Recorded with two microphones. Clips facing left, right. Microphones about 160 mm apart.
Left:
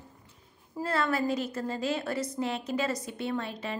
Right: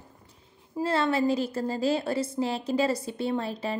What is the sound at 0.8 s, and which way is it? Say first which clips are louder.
A woman's voice: right 4 dB; 25° right (ahead or behind).